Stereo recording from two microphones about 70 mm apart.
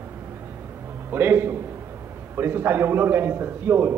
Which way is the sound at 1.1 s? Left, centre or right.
Right.